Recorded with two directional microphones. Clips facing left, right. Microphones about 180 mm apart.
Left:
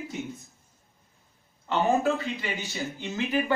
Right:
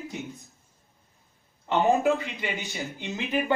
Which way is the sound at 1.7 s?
15° right (ahead or behind).